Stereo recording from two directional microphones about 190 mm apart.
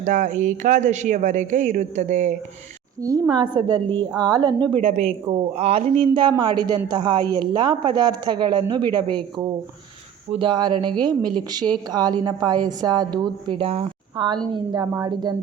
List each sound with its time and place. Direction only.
0.0 s speech: 40° right (ahead or behind)
3.0 s speech: 20° right (ahead or behind)